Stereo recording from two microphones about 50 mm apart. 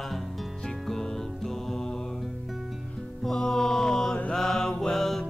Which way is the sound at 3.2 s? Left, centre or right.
Centre.